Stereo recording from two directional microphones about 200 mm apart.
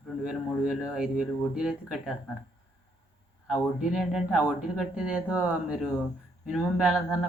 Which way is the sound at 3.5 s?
Centre (ahead or behind).